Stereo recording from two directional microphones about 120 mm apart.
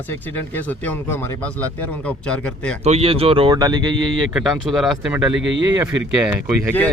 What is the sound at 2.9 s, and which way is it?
Speech, 55° right (ahead or behind).